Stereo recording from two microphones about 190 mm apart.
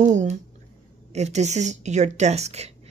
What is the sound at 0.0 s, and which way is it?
Speech, 40° right (ahead or behind).